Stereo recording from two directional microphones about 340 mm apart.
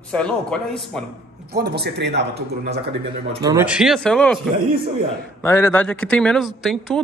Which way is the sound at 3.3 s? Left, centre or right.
Centre.